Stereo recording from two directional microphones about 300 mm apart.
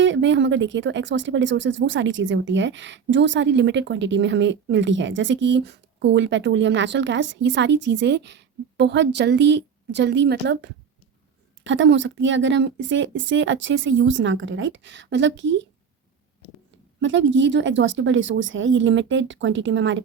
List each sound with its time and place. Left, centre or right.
0.0 s speech: right
17.0 s speech: right